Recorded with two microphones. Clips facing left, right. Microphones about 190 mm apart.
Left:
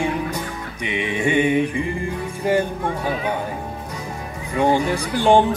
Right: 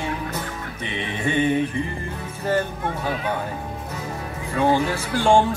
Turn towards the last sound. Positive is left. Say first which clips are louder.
# left 2 dB
turn(degrees=15)  # may be behind; listen again after turning